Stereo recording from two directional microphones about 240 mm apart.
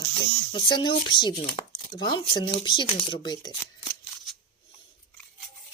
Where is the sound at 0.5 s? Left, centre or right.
Centre.